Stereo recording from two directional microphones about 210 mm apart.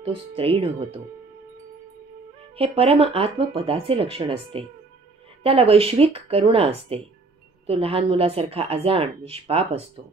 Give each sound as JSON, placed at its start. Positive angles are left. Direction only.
{"t": 0.0, "sound": "speech", "side_deg": -25}
{"t": 2.5, "sound": "speech", "side_deg": -30}